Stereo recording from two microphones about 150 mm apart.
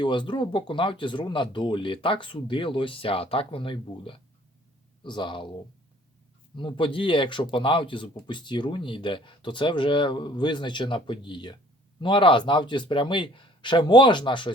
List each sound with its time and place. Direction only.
0.0 s speech: 30° left (ahead or behind)
6.6 s speech: 35° left (ahead or behind)